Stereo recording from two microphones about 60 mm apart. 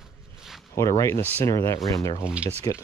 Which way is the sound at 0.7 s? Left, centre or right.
Left.